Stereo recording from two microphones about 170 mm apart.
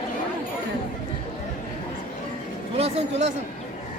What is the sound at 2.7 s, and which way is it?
Speech, 35° right (ahead or behind).